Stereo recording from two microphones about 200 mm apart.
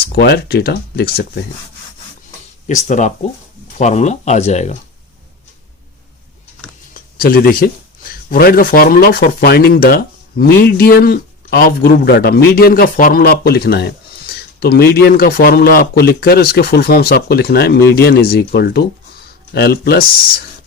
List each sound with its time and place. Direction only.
0.0 s speech: 50° left (ahead or behind)
2.6 s speech: 35° left (ahead or behind)
6.9 s a sound: 45° left (ahead or behind)
8.3 s speech: 45° left (ahead or behind)